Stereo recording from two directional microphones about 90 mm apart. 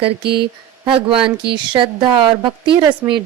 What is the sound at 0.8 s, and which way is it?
Speech, 90° right.